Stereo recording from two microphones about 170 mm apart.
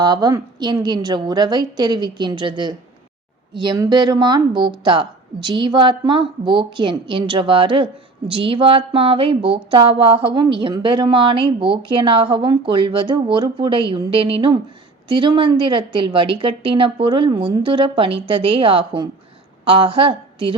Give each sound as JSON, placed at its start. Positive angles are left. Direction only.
{"t": 0.0, "sound": "a woman's voice", "side_deg": -25}